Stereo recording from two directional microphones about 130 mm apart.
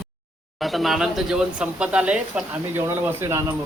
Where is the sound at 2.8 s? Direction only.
20° right (ahead or behind).